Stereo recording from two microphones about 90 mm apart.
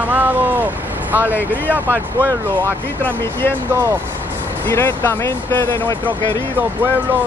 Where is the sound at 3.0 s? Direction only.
25° left (ahead or behind).